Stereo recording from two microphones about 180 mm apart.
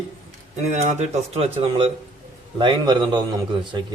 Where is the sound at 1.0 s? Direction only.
35° right (ahead or behind).